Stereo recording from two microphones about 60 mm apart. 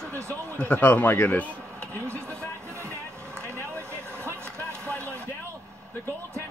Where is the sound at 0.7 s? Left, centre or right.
Left.